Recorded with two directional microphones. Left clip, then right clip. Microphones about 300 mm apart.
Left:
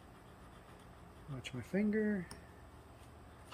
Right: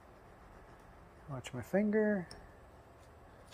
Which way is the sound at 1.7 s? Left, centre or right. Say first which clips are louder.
Right 5 dB; right.